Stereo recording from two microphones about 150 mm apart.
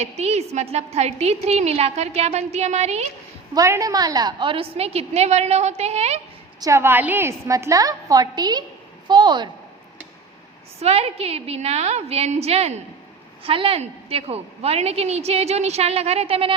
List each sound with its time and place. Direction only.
0.0 s a woman's voice: 45° right (ahead or behind)
3.5 s a woman's voice: 20° right (ahead or behind); by 6.1 s 45° right (ahead or behind)
6.6 s a woman's voice: 20° right (ahead or behind)
10.8 s a woman's voice: 45° right (ahead or behind)